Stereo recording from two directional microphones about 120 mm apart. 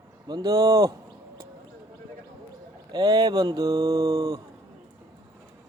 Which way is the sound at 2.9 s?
35° right (ahead or behind).